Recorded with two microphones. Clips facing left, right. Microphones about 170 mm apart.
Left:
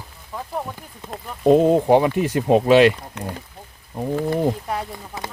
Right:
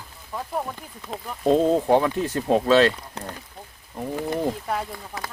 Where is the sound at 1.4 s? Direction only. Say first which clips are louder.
Left 4 dB; 15° left (ahead or behind).